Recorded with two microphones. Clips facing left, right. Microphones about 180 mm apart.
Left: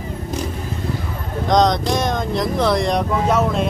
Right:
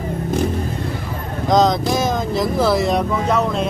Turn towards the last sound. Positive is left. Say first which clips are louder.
# left 1 dB
turn(degrees=0)  # may be behind; listen again after turning